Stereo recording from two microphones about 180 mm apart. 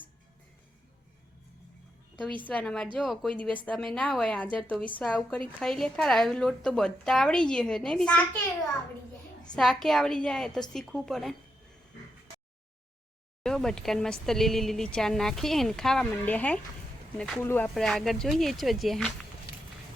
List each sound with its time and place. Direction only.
2.5 s speech: 5° left (ahead or behind)
9.6 s speech: centre (ahead or behind)
13.4 s speech: 5° left (ahead or behind)